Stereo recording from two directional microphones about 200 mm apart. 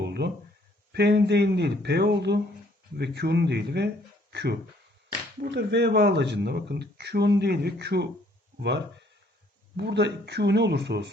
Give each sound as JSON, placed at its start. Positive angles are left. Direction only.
{"t": 0.0, "sound": "a sound", "side_deg": -55}
{"t": 0.9, "sound": "speech", "side_deg": -55}
{"t": 9.7, "sound": "speech", "side_deg": -55}